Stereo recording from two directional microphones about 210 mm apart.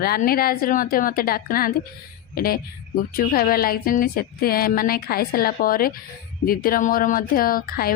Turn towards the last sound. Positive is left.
turn(degrees=45)  # may be behind; listen again after turning